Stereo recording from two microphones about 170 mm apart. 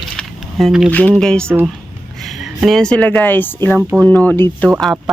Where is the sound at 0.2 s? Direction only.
Centre (ahead or behind).